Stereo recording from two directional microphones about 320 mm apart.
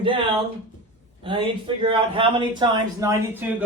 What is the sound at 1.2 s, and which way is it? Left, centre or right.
A man's voice, centre.